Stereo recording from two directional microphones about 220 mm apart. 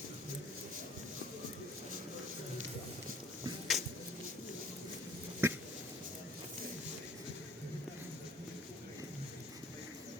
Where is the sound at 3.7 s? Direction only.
Centre (ahead or behind).